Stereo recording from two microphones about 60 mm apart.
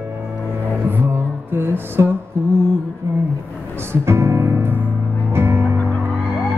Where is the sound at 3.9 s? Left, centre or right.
Right.